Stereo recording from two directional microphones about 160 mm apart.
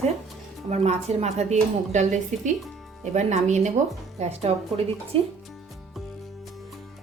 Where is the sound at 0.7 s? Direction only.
40° right (ahead or behind).